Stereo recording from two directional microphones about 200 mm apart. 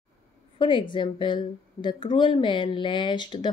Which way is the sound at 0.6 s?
25° left (ahead or behind).